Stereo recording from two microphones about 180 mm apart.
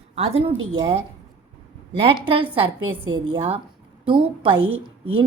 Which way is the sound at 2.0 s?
30° right (ahead or behind).